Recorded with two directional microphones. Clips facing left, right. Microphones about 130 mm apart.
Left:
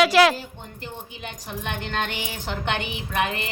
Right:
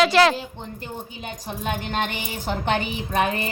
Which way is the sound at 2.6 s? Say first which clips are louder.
Right 4 dB; 35° right (ahead or behind).